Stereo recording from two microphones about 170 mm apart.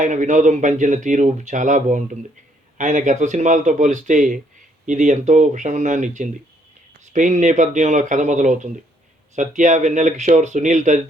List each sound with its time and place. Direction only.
0.0 s speech: 45° right (ahead or behind)